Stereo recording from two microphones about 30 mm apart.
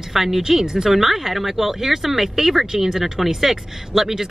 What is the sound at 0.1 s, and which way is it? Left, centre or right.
Speech, centre.